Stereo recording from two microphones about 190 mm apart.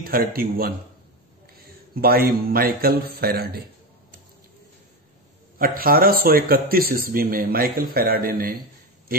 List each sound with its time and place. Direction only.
0.0 s speech: 50° right (ahead or behind)
2.0 s speech: 50° right (ahead or behind)
5.6 s speech: 50° right (ahead or behind)